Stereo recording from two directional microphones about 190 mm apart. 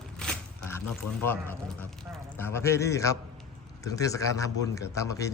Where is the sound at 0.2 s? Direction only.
5° left (ahead or behind).